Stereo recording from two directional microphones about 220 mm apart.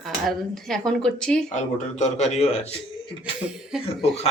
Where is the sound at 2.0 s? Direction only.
30° left (ahead or behind).